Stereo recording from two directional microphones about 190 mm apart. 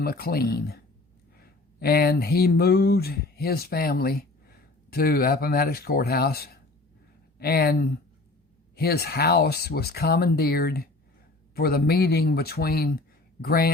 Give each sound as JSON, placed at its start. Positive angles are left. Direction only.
{"t": 0.0, "sound": "speech", "side_deg": 50}
{"t": 1.8, "sound": "speech", "side_deg": 55}